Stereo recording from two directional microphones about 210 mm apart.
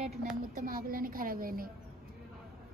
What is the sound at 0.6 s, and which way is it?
A woman's voice, 45° right (ahead or behind).